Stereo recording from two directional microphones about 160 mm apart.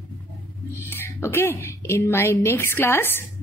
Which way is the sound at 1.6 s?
15° left (ahead or behind).